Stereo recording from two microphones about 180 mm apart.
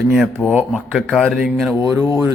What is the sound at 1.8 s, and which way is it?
Speech, 15° right (ahead or behind).